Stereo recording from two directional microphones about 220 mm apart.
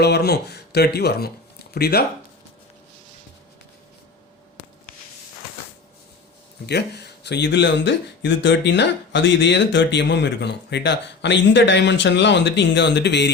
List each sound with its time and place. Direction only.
0.0 s speech: 50° left (ahead or behind)
6.7 s speech: 50° left (ahead or behind)